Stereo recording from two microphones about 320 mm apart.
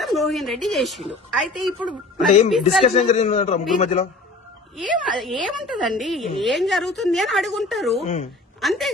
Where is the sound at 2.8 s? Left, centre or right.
Left.